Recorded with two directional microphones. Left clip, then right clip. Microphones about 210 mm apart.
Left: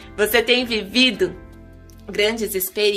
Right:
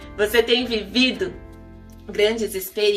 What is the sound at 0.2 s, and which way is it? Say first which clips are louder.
A woman's voice: left 1 dB; 55° left (ahead or behind).